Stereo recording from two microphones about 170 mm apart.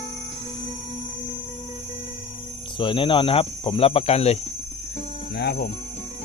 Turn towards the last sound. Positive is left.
turn(degrees=65)  # may be behind; listen again after turning